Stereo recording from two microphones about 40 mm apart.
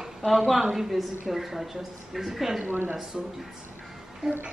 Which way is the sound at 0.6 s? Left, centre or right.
Centre.